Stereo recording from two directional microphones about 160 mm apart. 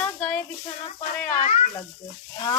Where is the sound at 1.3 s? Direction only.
45° left (ahead or behind).